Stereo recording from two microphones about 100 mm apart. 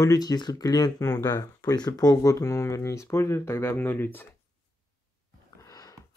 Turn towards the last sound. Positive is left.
turn(degrees=40)  # may be behind; listen again after turning